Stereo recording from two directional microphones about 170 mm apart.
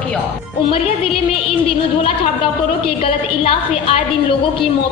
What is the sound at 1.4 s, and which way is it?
A woman's voice, 35° left (ahead or behind).